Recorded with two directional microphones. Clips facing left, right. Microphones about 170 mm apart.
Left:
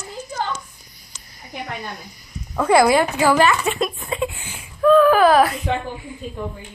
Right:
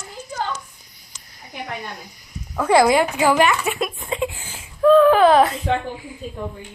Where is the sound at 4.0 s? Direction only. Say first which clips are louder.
Even; 20° right (ahead or behind).